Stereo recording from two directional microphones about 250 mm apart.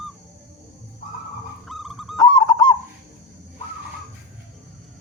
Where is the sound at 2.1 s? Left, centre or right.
Centre.